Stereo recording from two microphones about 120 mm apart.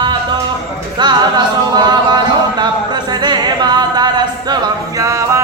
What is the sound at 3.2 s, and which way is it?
A capella, 35° right (ahead or behind).